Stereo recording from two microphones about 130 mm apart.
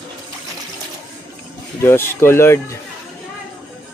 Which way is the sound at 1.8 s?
20° left (ahead or behind).